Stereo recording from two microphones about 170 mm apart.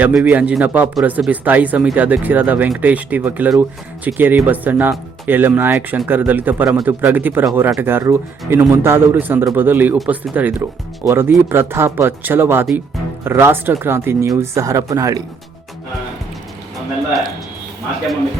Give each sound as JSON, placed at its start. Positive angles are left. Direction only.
{"t": 0.0, "sound": "a man's voice", "side_deg": -10}